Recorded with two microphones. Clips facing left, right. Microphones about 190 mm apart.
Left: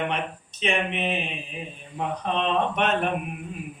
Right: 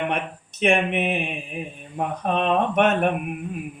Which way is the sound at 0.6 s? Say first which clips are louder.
Right 5 dB; 55° right (ahead or behind).